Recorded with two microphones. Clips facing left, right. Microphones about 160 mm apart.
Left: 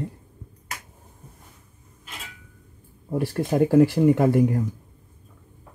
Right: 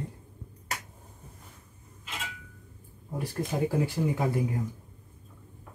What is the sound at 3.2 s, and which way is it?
Speech, 75° left (ahead or behind).